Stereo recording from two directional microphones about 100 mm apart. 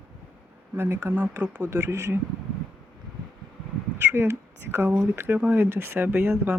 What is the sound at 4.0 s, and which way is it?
Speech, 25° right (ahead or behind).